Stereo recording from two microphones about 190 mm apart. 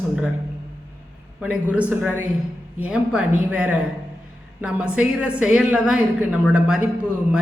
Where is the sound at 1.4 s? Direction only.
5° right (ahead or behind).